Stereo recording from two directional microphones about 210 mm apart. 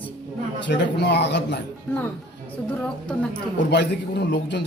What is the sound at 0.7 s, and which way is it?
Speech, 55° left (ahead or behind).